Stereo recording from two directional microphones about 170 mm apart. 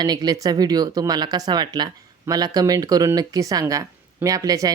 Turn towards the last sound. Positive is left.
turn(degrees=-20)  # may be behind; listen again after turning